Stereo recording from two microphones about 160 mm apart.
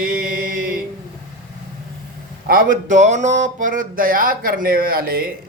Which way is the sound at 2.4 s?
60° right (ahead or behind).